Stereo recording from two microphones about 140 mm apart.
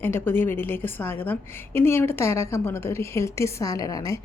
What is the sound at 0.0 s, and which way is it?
A woman's voice, 15° left (ahead or behind).